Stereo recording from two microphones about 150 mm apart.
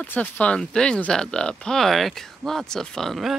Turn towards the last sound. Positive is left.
turn(degrees=0)  # may be behind; listen again after turning